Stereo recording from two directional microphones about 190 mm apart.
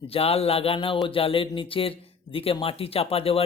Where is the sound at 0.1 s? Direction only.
30° left (ahead or behind).